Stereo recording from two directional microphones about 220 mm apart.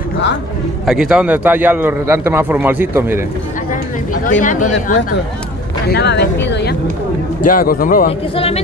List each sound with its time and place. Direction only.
0.8 s a man's voice: 5° right (ahead or behind)
4.1 s a man's voice: 35° left (ahead or behind)
5.9 s a man's voice: 50° left (ahead or behind)